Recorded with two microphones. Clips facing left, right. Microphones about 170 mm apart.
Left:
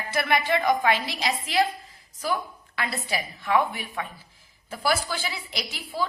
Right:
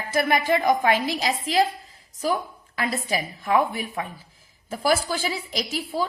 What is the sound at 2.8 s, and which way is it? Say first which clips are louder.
A woman's voice: right 4 dB; 45° right (ahead or behind).